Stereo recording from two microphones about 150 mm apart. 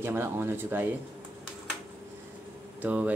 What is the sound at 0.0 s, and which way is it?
Speech, 15° right (ahead or behind).